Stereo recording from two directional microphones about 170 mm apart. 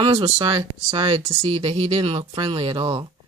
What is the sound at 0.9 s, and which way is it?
Speech, 35° right (ahead or behind).